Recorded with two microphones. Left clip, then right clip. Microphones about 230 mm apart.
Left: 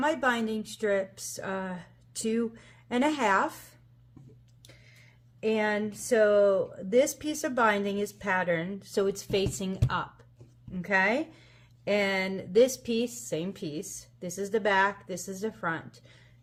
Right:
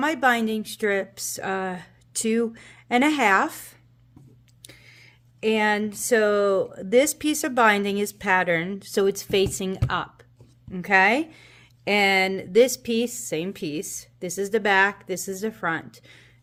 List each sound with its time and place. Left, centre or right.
0.0 s speech: right
4.6 s speech: right